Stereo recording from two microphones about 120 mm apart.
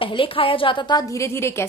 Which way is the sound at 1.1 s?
25° left (ahead or behind).